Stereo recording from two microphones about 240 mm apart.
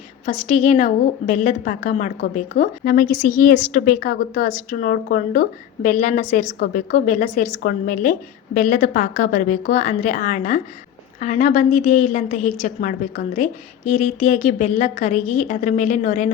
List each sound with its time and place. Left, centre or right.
0.3 s a woman's voice: left